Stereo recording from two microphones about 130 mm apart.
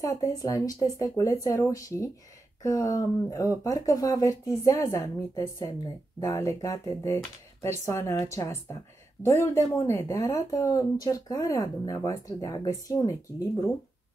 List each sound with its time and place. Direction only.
0.0 s speech: 25° left (ahead or behind)